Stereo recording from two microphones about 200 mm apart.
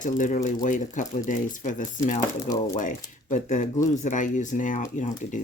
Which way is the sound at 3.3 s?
35° left (ahead or behind).